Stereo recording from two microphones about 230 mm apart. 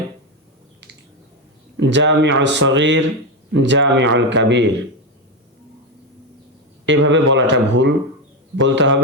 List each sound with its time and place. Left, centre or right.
1.7 s a man's voice: right
6.8 s a man's voice: right